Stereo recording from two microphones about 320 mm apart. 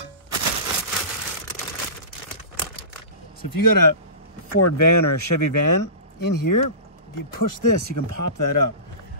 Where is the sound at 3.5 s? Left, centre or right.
Left.